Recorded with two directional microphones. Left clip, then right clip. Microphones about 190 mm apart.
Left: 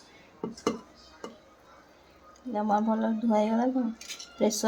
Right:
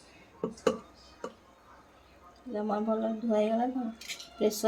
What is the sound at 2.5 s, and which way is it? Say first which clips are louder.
Speech: left 4 dB; 15° left (ahead or behind).